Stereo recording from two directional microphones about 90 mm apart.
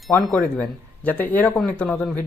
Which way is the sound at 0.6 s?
15° left (ahead or behind).